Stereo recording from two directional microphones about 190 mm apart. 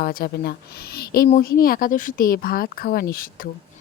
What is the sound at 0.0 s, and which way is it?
Speech, 50° left (ahead or behind).